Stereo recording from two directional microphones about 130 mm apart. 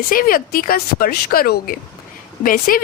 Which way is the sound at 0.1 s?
90° left.